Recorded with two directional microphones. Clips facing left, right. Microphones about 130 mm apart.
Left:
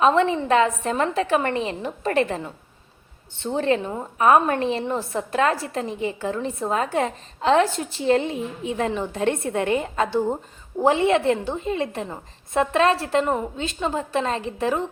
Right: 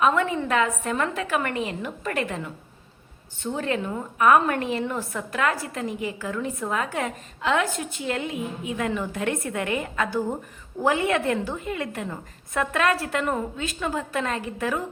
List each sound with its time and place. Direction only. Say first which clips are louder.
0.0 s a woman's voice: left 4 dB; 30° left (ahead or behind)